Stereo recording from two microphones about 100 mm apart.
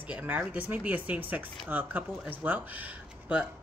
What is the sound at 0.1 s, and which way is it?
Speech, 20° right (ahead or behind).